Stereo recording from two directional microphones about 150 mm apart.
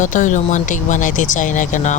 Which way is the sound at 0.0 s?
55° left (ahead or behind).